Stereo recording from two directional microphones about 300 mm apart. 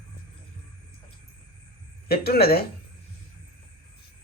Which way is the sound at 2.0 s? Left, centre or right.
Left.